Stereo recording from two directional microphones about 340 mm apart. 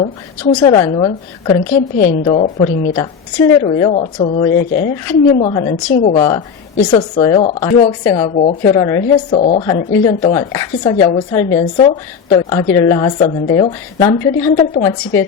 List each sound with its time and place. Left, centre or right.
0.5 s a woman's voice: centre